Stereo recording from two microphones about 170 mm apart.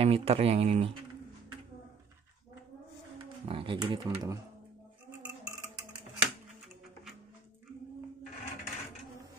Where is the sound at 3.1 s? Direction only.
30° right (ahead or behind).